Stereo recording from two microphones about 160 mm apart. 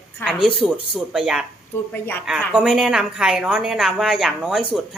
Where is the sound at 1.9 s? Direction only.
10° left (ahead or behind).